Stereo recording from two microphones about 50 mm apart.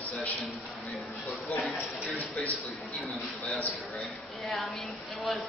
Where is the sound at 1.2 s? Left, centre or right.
Left.